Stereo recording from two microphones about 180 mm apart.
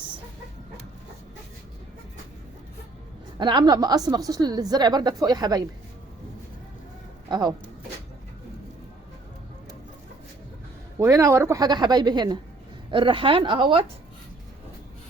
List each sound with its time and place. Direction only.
3.3 s a woman's voice: 25° right (ahead or behind)
7.3 s speech: 25° right (ahead or behind)
10.9 s a woman's voice: 20° right (ahead or behind)